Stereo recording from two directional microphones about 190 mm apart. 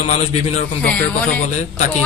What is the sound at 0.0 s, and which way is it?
Speech, 35° left (ahead or behind).